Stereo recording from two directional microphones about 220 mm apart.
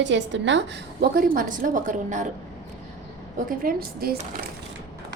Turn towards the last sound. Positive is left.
turn(degrees=-45)  # may be behind; listen again after turning